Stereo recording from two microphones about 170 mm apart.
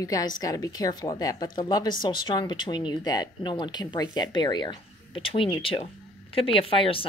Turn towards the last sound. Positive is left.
turn(degrees=30)  # may be behind; listen again after turning